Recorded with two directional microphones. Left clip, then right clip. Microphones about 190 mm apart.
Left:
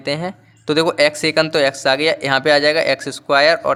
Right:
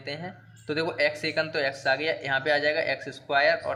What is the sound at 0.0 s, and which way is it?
A man's voice, 45° left (ahead or behind).